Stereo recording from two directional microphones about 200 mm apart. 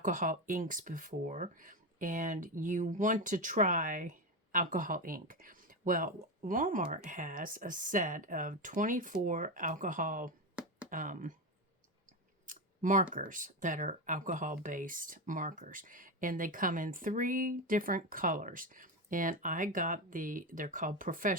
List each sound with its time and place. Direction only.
0.0 s speech: 40° right (ahead or behind)
12.5 s a sound: 40° right (ahead or behind)
13.1 s speech: 40° right (ahead or behind)